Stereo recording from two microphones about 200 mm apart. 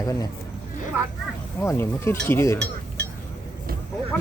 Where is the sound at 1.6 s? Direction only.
10° left (ahead or behind).